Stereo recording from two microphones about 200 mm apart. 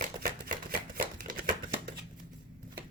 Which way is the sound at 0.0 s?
45° right (ahead or behind).